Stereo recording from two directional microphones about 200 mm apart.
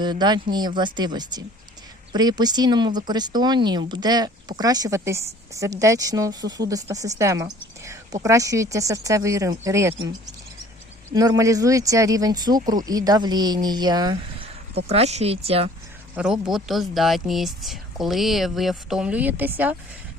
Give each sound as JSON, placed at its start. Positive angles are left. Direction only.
{"t": 0.0, "sound": "a woman's voice", "side_deg": -20}
{"t": 11.1, "sound": "speech", "side_deg": -20}
{"t": 16.1, "sound": "speech", "side_deg": -5}